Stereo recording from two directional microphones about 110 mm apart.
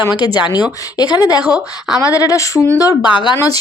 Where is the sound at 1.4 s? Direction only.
10° right (ahead or behind).